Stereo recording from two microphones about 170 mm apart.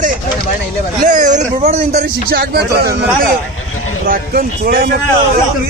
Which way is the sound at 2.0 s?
60° right (ahead or behind).